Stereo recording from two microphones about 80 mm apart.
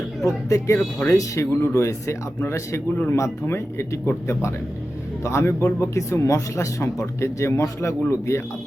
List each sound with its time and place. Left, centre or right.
0.3 s speech: left